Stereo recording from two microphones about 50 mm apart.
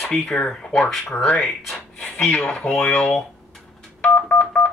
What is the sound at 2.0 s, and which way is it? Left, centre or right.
Speech, left.